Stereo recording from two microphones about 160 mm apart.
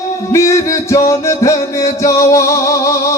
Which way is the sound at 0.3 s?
20° left (ahead or behind).